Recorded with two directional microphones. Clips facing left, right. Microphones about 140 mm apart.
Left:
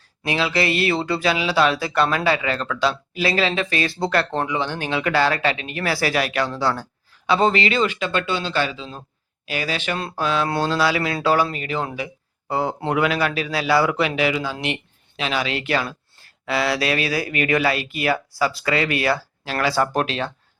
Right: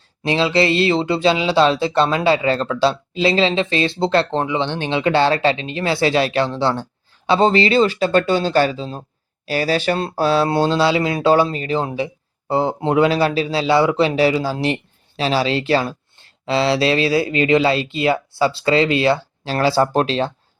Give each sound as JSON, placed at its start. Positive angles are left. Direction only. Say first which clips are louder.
{"t": 0.2, "sound": "speech", "louder": "right 5 dB", "side_deg": -25}